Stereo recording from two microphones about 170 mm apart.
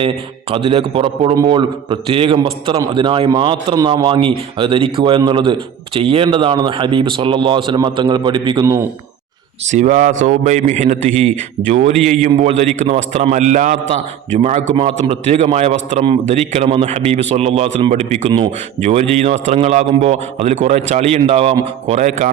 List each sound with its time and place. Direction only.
0.5 s a man's voice: 30° right (ahead or behind)
9.6 s a man's voice: 45° right (ahead or behind)